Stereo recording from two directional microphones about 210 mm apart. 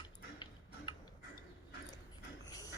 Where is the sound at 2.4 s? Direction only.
15° left (ahead or behind).